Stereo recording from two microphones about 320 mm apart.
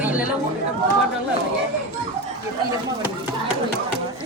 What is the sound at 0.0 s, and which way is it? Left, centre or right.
Chatter, centre.